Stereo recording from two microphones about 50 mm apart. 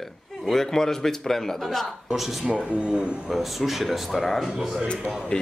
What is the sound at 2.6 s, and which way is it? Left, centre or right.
Speech, right.